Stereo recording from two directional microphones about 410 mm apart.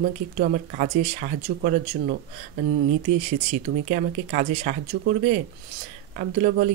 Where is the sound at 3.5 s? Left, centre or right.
Centre.